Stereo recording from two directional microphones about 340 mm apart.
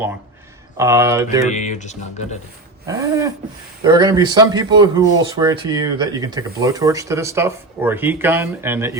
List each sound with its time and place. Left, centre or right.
0.8 s speech: centre
1.5 s speech: left
2.8 s speech: centre